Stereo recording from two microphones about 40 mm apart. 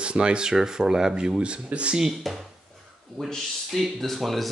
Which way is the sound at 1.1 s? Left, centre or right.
Right.